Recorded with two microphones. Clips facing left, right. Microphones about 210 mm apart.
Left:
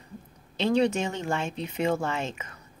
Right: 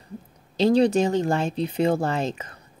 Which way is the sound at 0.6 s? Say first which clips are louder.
Right 6 dB; 35° right (ahead or behind).